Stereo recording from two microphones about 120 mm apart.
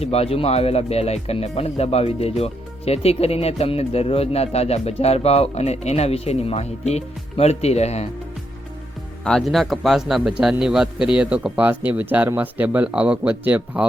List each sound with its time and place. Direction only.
0.0 s speech: 60° left (ahead or behind)
9.2 s a man's voice: 5° left (ahead or behind); by 13.8 s 10° right (ahead or behind)